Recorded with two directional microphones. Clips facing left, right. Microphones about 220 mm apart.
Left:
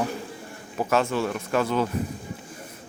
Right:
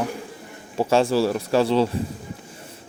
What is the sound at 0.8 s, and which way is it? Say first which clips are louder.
Speech: right 5 dB; 30° right (ahead or behind).